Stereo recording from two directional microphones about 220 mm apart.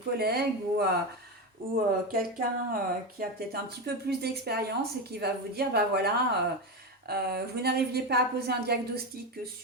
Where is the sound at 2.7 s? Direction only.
45° right (ahead or behind).